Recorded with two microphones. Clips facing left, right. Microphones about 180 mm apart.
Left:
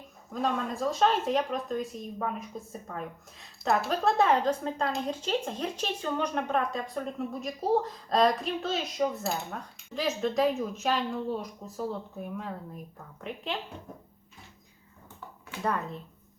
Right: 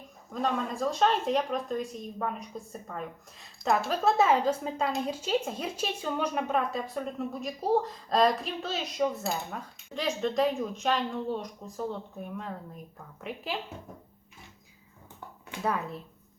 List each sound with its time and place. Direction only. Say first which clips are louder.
0.3 s speech: even; centre (ahead or behind)
15.6 s speech: even; 5° right (ahead or behind)